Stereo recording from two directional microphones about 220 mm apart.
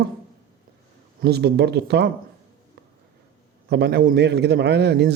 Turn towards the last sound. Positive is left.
turn(degrees=-50)  # may be behind; listen again after turning